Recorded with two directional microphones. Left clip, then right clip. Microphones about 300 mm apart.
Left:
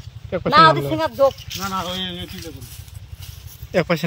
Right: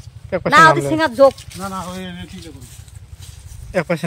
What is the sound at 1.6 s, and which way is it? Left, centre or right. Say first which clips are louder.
Speech: left 2 dB; right.